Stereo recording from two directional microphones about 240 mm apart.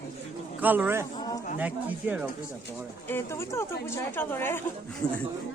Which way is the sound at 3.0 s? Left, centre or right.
Centre.